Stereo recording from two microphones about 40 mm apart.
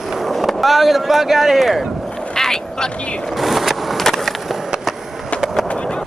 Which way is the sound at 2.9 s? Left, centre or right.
Left.